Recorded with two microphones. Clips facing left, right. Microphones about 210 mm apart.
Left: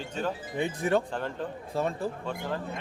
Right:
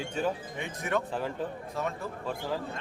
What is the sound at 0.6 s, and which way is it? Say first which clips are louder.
Speech: left 5 dB; 30° left (ahead or behind).